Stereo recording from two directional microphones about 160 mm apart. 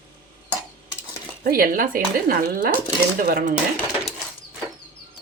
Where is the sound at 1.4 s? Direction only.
65° right (ahead or behind).